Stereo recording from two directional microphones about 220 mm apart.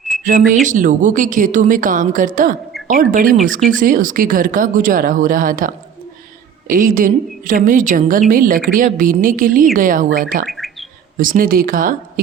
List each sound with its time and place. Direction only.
0.3 s a woman's voice: 35° right (ahead or behind)
10.4 s bird: centre (ahead or behind)
11.2 s a woman's voice: 40° right (ahead or behind)